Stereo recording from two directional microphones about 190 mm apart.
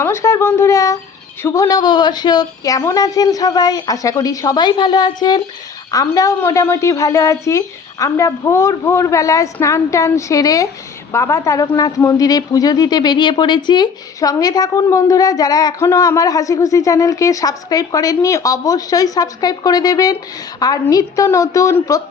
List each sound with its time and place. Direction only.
0.0 s a woman's voice: 15° left (ahead or behind)